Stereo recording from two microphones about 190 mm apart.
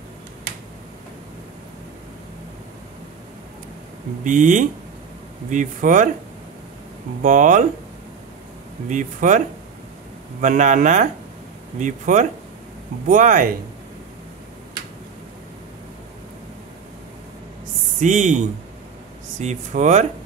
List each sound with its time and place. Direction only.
4.2 s speech: 40° right (ahead or behind)
7.2 s speech: 40° right (ahead or behind)
8.8 s speech: 40° right (ahead or behind)
10.4 s speech: 40° right (ahead or behind)
18.0 s speech: 40° right (ahead or behind)